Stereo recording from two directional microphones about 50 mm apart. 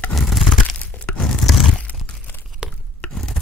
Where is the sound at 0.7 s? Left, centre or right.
Left.